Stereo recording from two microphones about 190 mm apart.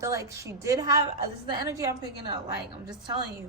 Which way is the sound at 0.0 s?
15° right (ahead or behind).